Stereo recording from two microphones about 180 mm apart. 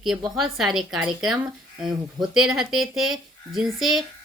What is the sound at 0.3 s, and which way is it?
Speech, centre (ahead or behind).